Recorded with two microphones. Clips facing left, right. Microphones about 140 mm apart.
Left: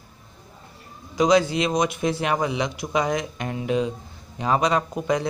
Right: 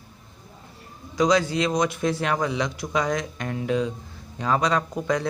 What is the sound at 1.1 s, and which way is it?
A man's voice, 20° left (ahead or behind).